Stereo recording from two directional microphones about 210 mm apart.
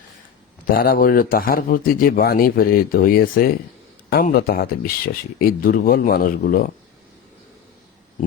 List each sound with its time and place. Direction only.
0.7 s speech: 45° left (ahead or behind)